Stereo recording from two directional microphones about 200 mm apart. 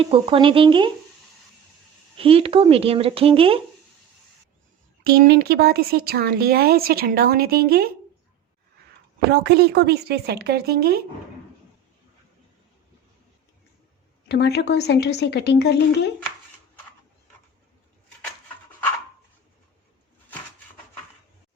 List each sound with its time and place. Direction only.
0.0 s speech: 25° right (ahead or behind)
2.1 s speech: 30° right (ahead or behind)
5.0 s speech: 50° right (ahead or behind)
9.3 s speech: 55° right (ahead or behind)
14.3 s a woman's voice: 55° left (ahead or behind)